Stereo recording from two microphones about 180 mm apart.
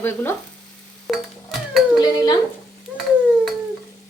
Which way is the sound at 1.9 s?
25° left (ahead or behind).